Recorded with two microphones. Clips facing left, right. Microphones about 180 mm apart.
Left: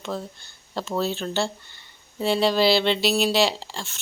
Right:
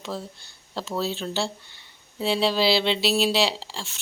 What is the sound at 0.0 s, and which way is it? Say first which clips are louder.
Speech: left 2 dB; 5° right (ahead or behind).